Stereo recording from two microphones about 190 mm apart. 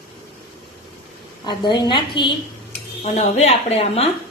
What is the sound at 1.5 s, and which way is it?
Speech, 25° left (ahead or behind).